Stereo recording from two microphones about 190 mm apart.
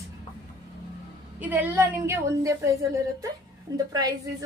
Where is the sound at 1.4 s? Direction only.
10° right (ahead or behind).